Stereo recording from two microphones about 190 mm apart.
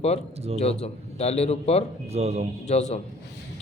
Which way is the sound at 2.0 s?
35° right (ahead or behind).